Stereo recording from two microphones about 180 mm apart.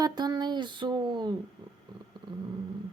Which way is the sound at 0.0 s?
20° right (ahead or behind).